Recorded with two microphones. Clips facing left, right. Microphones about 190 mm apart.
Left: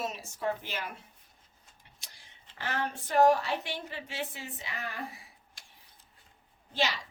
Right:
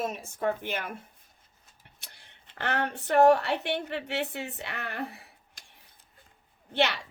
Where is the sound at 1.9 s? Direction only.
60° right (ahead or behind).